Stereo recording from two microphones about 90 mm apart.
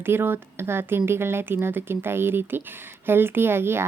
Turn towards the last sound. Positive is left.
turn(degrees=-25)  # may be behind; listen again after turning